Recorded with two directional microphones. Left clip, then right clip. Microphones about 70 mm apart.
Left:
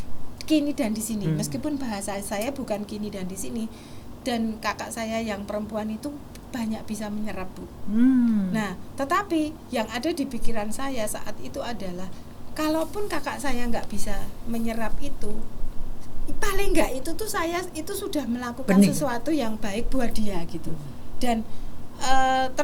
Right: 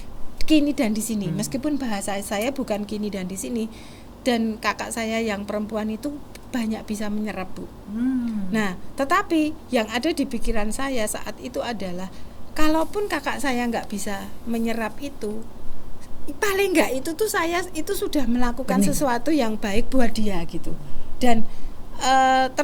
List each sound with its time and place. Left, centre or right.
0.3 s a woman's voice: right